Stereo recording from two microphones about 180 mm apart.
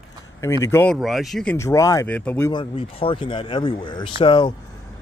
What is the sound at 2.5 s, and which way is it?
Speech, 30° left (ahead or behind).